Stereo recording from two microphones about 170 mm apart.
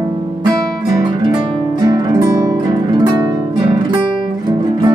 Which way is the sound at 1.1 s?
25° right (ahead or behind).